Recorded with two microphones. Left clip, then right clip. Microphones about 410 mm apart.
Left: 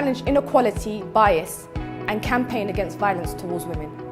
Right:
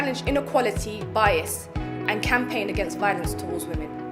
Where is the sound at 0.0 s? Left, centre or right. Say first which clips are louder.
Left 4 dB; left.